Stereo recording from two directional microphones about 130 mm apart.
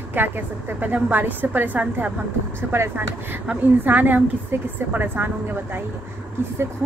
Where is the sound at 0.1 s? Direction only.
15° right (ahead or behind).